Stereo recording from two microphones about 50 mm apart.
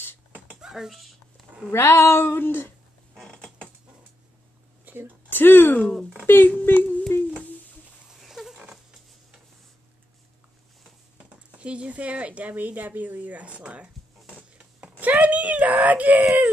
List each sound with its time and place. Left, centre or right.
0.6 s speech: centre
1.7 s speech: left
4.9 s a sound: right
5.3 s speech: left
6.6 s a sound: left
8.1 s pig: centre
11.5 s speech: right